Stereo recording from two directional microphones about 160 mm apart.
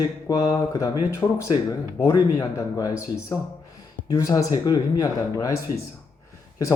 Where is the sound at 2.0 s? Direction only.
25° left (ahead or behind).